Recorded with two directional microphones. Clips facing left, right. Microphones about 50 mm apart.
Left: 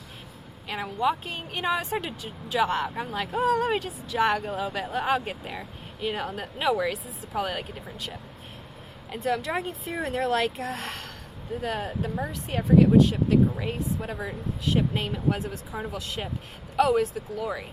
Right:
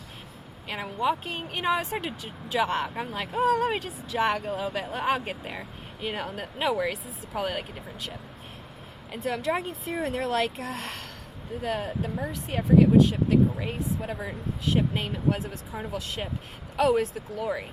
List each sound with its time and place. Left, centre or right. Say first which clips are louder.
0.7 s speech: left 1 dB; centre
4.9 s speech: left 2 dB; centre
6.1 s speech: left 1 dB; centre
9.1 s speech: left 1 dB; centre
17.4 s speech: right 2 dB; centre